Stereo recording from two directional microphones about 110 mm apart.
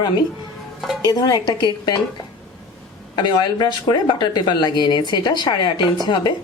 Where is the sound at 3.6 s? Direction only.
40° left (ahead or behind).